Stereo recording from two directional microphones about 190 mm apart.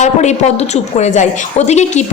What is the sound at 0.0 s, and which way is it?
A woman's voice, 35° left (ahead or behind).